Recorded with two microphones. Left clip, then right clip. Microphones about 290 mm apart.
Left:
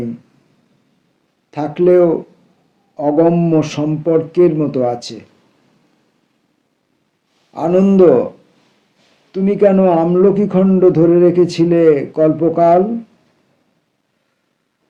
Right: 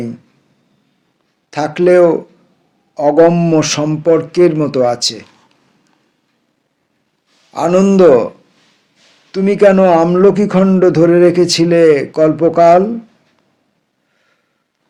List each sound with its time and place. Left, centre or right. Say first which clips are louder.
1.5 s a man's voice: right 2 dB; right
3.2 s a man's voice: right 3 dB; right
7.5 s a man's voice: right 2 dB; right
9.3 s a man's voice: right 3 dB; right